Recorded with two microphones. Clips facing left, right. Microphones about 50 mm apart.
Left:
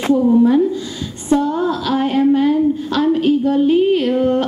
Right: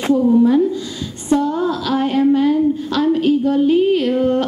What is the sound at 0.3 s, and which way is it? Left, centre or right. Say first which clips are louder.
A woman's voice: even; left.